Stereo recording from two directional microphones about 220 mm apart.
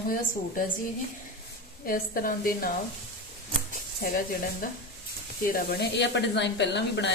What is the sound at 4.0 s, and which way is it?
A woman's voice, 40° left (ahead or behind).